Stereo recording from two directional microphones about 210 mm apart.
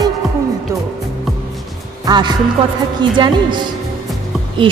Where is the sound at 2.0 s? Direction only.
20° right (ahead or behind).